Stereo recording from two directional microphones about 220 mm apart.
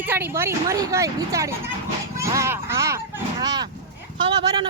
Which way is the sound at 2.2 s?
15° right (ahead or behind).